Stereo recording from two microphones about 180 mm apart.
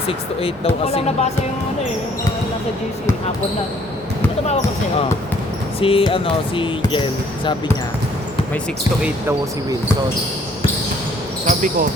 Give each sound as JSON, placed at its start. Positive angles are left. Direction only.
{"t": 0.1, "sound": "speech", "side_deg": 30}
{"t": 5.8, "sound": "speech", "side_deg": 30}
{"t": 11.4, "sound": "speech", "side_deg": -45}